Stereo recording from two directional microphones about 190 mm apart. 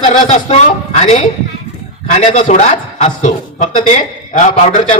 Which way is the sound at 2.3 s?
40° left (ahead or behind).